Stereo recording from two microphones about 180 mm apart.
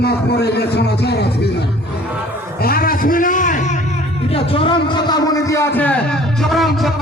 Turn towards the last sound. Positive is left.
turn(degrees=0)  # may be behind; listen again after turning